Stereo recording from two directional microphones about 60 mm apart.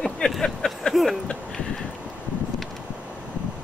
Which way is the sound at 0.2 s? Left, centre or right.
Centre.